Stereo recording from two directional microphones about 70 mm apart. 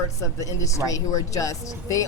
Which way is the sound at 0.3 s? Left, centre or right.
Left.